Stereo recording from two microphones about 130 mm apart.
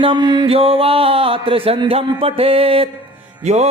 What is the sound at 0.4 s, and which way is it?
A man's voice, 50° right (ahead or behind).